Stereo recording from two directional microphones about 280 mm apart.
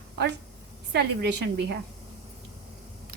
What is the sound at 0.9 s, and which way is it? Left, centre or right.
Speech, right.